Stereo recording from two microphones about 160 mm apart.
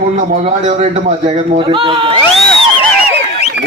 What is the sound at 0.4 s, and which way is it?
Speech, 45° right (ahead or behind).